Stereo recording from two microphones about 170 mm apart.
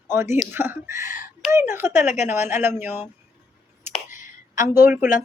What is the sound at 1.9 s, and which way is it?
Speech, 45° left (ahead or behind).